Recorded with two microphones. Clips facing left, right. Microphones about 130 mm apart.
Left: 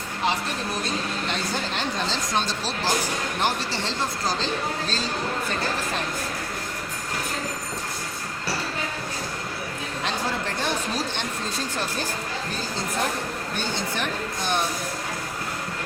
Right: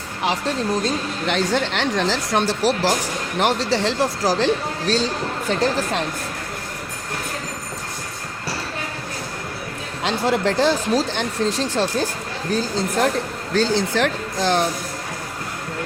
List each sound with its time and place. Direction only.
1.3 s speech: 85° right
10.0 s speech: 90° right
13.5 s speech: 90° right